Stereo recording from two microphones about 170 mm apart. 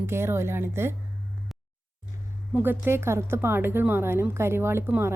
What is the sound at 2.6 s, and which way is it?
A woman's voice, 10° right (ahead or behind).